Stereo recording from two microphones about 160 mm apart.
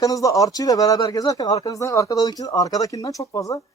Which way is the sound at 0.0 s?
20° left (ahead or behind).